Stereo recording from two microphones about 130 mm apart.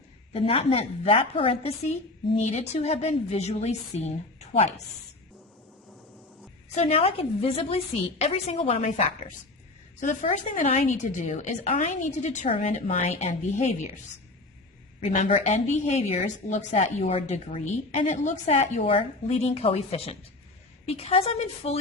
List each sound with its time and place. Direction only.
0.3 s a woman's voice: 50° left (ahead or behind)
6.7 s a woman's voice: 55° left (ahead or behind); by 12.5 s 70° left (ahead or behind)
12.5 s a woman's voice: 55° left (ahead or behind)
15.2 s a woman's voice: 55° left (ahead or behind)